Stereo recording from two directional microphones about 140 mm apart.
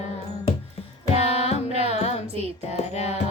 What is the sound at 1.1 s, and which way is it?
Music, 50° left (ahead or behind).